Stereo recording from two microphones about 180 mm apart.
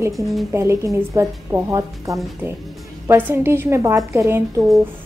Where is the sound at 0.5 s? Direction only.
15° right (ahead or behind).